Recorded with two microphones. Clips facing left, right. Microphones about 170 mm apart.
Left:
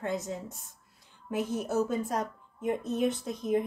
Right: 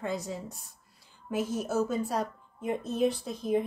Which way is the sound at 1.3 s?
15° left (ahead or behind).